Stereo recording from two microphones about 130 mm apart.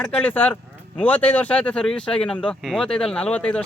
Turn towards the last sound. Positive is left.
turn(degrees=10)  # may be behind; listen again after turning